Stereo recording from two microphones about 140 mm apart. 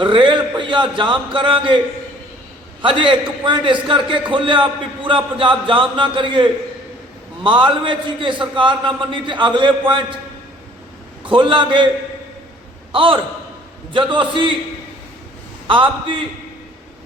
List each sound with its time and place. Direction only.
0.0 s a man's voice: 35° right (ahead or behind)
2.8 s a man's voice: 40° right (ahead or behind)
11.2 s a man's voice: 35° right (ahead or behind)
12.9 s a man's voice: 40° right (ahead or behind)
15.6 s a man's voice: 35° right (ahead or behind)